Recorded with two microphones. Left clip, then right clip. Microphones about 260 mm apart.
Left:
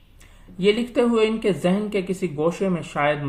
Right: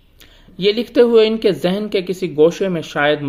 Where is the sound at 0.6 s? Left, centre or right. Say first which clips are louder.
Right 6 dB; right.